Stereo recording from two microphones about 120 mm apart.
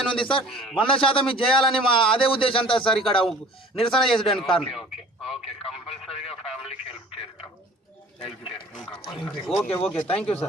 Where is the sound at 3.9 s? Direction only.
5° left (ahead or behind).